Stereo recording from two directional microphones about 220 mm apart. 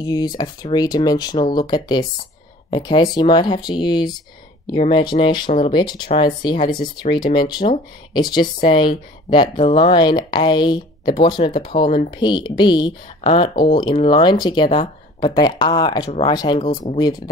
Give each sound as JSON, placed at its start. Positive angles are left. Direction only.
{"t": 0.0, "sound": "speech", "side_deg": 20}